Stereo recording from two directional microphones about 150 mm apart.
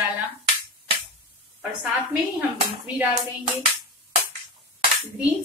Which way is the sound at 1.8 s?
10° right (ahead or behind).